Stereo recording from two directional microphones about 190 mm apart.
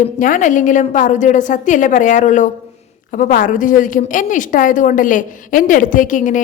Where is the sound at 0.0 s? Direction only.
45° left (ahead or behind).